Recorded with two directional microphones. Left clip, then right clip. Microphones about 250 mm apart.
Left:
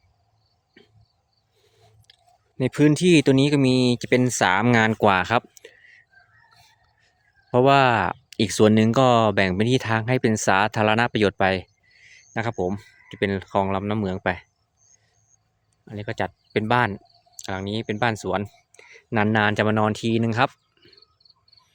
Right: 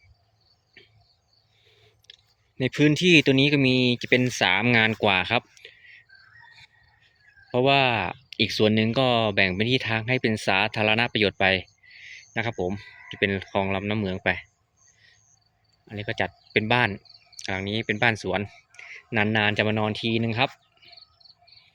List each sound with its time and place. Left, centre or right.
2.0 s clicking: left
2.6 s speech: left
7.5 s speech: left
15.9 s speech: centre